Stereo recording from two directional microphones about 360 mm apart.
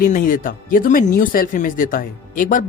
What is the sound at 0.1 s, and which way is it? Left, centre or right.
Speech, left.